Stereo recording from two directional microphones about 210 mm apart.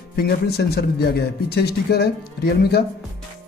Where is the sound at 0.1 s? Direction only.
50° left (ahead or behind).